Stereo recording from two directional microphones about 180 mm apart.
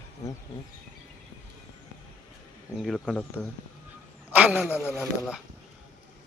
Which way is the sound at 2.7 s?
Centre (ahead or behind).